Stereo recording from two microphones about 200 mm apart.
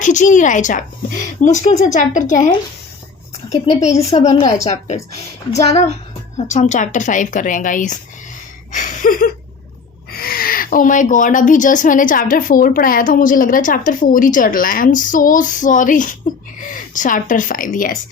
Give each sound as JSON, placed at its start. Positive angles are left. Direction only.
{"t": 0.0, "sound": "speech", "side_deg": 40}
{"t": 3.5, "sound": "speech", "side_deg": 35}
{"t": 6.3, "sound": "speech", "side_deg": 35}
{"t": 8.7, "sound": "a sound", "side_deg": 40}
{"t": 10.1, "sound": "speech", "side_deg": 50}